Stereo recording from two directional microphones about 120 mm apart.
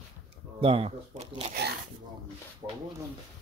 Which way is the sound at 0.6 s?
55° right (ahead or behind).